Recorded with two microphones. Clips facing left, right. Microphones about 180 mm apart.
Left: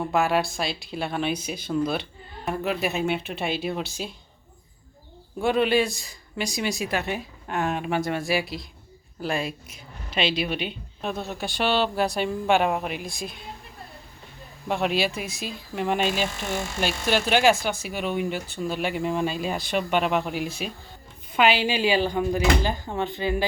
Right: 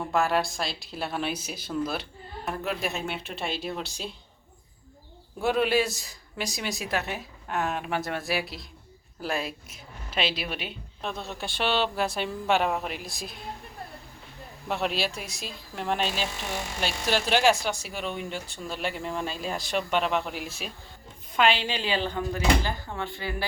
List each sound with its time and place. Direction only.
0.0 s a woman's voice: centre (ahead or behind)
5.4 s a woman's voice: 5° right (ahead or behind)
14.7 s a woman's voice: centre (ahead or behind); by 23.5 s 20° left (ahead or behind)